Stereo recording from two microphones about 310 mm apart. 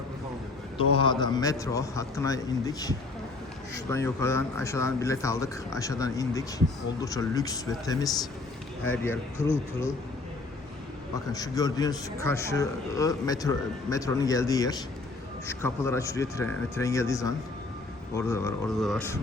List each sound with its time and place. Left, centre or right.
0.9 s a man's voice: centre
11.3 s a man's voice: centre